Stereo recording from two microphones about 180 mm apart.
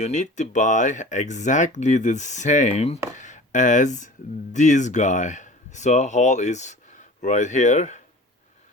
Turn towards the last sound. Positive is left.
turn(degrees=40)  # may be behind; listen again after turning